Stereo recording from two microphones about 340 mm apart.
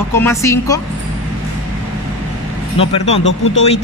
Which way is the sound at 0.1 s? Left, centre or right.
Centre.